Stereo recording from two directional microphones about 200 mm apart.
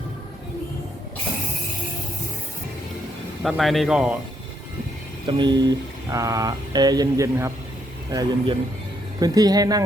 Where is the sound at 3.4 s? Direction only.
Centre (ahead or behind).